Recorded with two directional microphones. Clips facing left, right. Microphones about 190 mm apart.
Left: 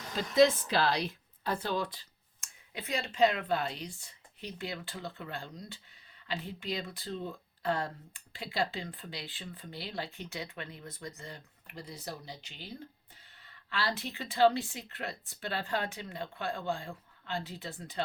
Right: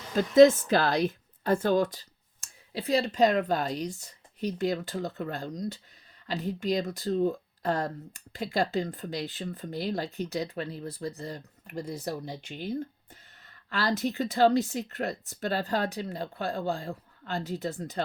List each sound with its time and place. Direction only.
0.2 s a woman's voice: 45° right (ahead or behind)